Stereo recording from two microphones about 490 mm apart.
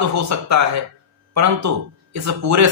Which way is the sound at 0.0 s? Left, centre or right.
Right.